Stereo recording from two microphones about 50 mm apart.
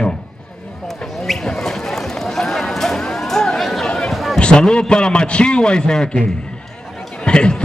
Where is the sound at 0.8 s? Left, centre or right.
Centre.